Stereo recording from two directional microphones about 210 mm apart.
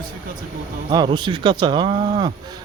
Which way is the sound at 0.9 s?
20° right (ahead or behind).